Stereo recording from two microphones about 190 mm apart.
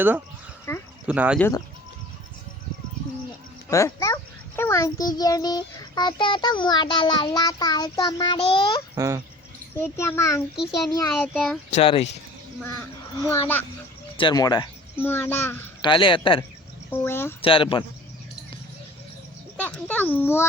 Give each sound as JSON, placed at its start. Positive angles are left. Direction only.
{"t": 0.7, "sound": "a child's voice", "side_deg": 15}
{"t": 1.0, "sound": "speech", "side_deg": -5}
{"t": 1.4, "sound": "a child's voice", "side_deg": 15}
{"t": 3.7, "sound": "a child's voice", "side_deg": 15}
{"t": 9.0, "sound": "speech", "side_deg": -15}
{"t": 9.7, "sound": "a child's voice", "side_deg": 10}
{"t": 11.1, "sound": "speech", "side_deg": 5}
{"t": 11.7, "sound": "speech", "side_deg": 30}
{"t": 13.1, "sound": "a child's voice", "side_deg": 15}
{"t": 14.2, "sound": "a child's voice", "side_deg": 20}
{"t": 15.8, "sound": "a child's voice", "side_deg": 25}
{"t": 16.9, "sound": "a child's voice", "side_deg": 10}
{"t": 17.4, "sound": "a child's voice", "side_deg": 30}
{"t": 19.5, "sound": "a child's voice", "side_deg": 10}